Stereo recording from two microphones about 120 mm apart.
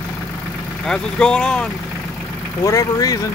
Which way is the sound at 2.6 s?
30° left (ahead or behind).